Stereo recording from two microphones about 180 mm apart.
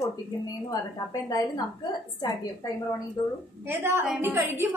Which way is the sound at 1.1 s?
20° left (ahead or behind).